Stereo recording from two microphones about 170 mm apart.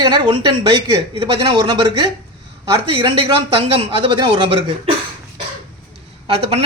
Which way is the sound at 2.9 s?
35° right (ahead or behind).